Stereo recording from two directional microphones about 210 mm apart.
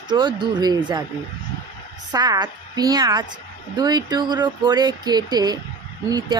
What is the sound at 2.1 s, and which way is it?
Speech, 20° right (ahead or behind).